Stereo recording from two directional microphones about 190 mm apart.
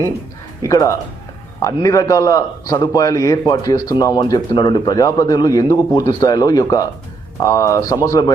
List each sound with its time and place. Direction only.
0.6 s a man's voice: 15° left (ahead or behind)